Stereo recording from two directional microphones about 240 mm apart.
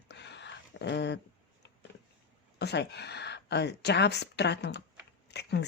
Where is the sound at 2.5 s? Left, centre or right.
Left.